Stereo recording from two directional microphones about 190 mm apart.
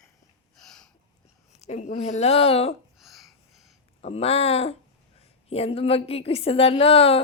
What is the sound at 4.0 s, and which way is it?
A woman's voice, 30° left (ahead or behind).